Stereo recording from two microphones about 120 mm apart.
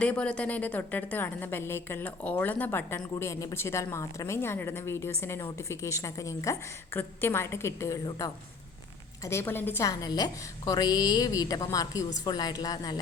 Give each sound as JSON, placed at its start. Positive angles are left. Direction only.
{"t": 0.0, "sound": "a woman's voice", "side_deg": 10}
{"t": 9.2, "sound": "a woman's voice", "side_deg": 20}